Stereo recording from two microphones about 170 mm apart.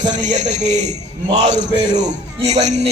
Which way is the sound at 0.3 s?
45° right (ahead or behind).